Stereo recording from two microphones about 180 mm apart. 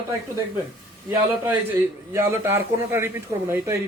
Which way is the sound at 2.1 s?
15° right (ahead or behind).